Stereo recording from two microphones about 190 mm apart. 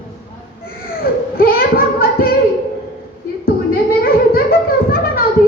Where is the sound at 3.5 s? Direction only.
50° left (ahead or behind).